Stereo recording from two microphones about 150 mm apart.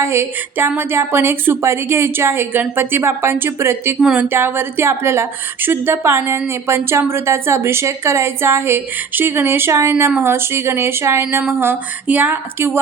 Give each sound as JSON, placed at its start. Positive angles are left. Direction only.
{"t": 0.0, "sound": "a woman's voice", "side_deg": -15}